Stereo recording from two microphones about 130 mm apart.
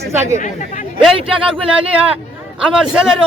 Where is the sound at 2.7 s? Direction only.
5° right (ahead or behind).